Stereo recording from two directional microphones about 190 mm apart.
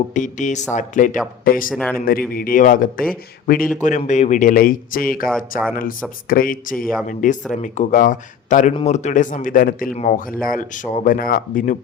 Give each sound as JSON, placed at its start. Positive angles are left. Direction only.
{"t": 0.1, "sound": "speech", "side_deg": 40}
{"t": 1.7, "sound": "speech", "side_deg": 0}
{"t": 2.3, "sound": "speech", "side_deg": 50}